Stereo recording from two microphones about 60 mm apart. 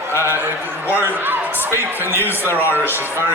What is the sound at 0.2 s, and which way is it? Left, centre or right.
A man's voice, right.